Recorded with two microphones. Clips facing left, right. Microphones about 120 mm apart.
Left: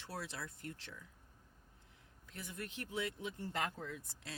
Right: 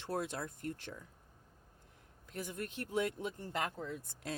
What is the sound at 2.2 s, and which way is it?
A woman's voice, 45° right (ahead or behind).